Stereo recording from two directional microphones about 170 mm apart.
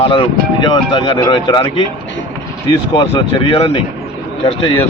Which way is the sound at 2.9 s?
25° left (ahead or behind).